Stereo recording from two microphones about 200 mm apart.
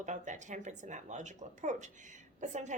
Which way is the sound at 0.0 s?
35° right (ahead or behind).